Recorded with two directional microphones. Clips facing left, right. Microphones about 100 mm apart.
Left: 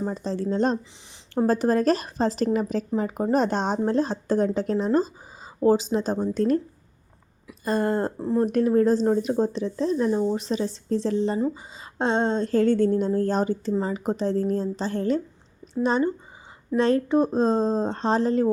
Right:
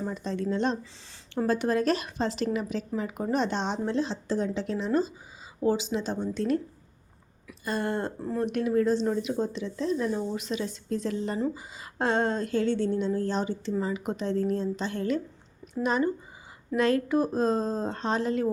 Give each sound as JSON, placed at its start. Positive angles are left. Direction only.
{"t": 0.1, "sound": "speech", "side_deg": 35}
{"t": 7.6, "sound": "speech", "side_deg": 35}
{"t": 12.5, "sound": "speech", "side_deg": 45}